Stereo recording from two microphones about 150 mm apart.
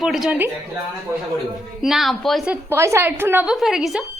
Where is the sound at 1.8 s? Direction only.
Centre (ahead or behind).